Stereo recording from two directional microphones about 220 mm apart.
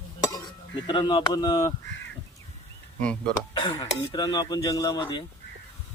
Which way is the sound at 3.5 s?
20° left (ahead or behind).